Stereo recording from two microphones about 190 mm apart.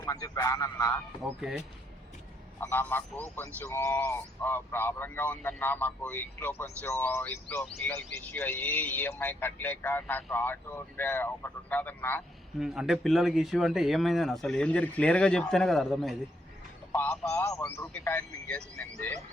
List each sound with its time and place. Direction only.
0.0 s speech: 15° left (ahead or behind)
1.4 s speech: 5° right (ahead or behind)
2.6 s speech: 10° left (ahead or behind)
12.5 s a man's voice: centre (ahead or behind)